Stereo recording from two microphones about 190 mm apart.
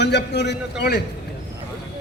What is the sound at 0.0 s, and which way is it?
A man's voice, 60° left (ahead or behind).